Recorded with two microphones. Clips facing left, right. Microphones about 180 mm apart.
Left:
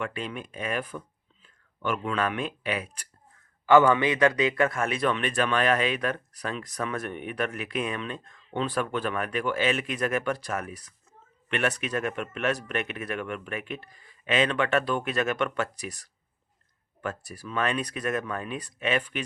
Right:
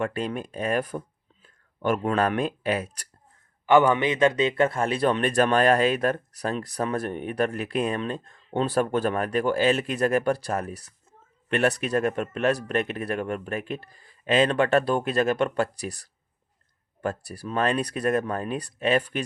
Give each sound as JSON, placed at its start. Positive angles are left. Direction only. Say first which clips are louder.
{"t": 0.0, "sound": "speech", "louder": "right 5 dB", "side_deg": -40}
{"t": 3.7, "sound": "speech", "louder": "even", "side_deg": -20}